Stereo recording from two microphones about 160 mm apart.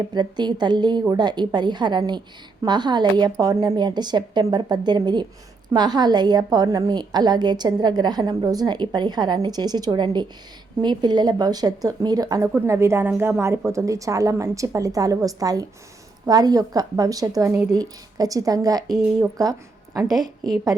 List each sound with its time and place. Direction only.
0.1 s a woman's voice: 25° right (ahead or behind)